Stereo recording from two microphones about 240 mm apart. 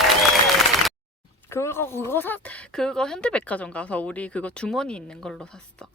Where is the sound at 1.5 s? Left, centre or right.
Centre.